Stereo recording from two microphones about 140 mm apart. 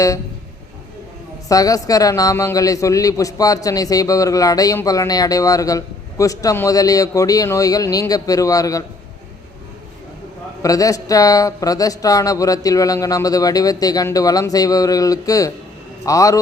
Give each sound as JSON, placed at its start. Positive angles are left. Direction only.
{"t": 1.5, "sound": "a man's voice", "side_deg": 25}
{"t": 10.6, "sound": "a man's voice", "side_deg": 25}